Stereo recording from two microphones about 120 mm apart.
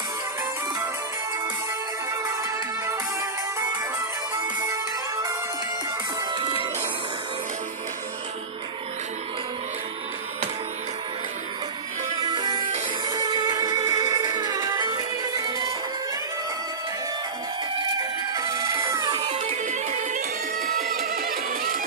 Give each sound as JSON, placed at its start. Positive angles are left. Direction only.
{"t": 4.6, "sound": "music", "side_deg": -30}
{"t": 6.3, "sound": "music", "side_deg": -40}
{"t": 12.2, "sound": "music", "side_deg": -35}
{"t": 18.3, "sound": "chicken", "side_deg": -30}
{"t": 19.1, "sound": "music", "side_deg": -55}